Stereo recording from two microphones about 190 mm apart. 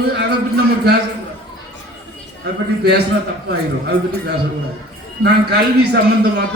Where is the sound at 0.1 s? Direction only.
60° right (ahead or behind).